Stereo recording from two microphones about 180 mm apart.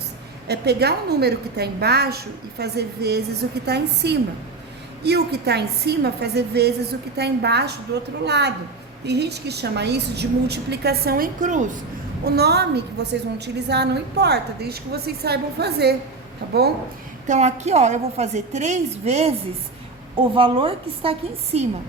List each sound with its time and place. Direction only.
0.4 s a woman's voice: 65° right (ahead or behind); by 11.8 s 45° right (ahead or behind)
12.2 s a woman's voice: 65° right (ahead or behind)
17.2 s a woman's voice: 40° right (ahead or behind)
20.3 s a woman's voice: 30° right (ahead or behind)